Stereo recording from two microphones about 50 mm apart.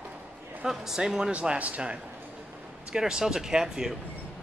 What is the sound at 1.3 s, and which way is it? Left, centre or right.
Speech, right.